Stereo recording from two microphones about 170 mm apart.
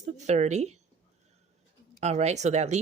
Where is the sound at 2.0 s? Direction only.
40° right (ahead or behind).